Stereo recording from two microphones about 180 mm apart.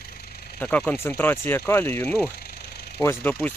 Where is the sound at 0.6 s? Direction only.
10° left (ahead or behind).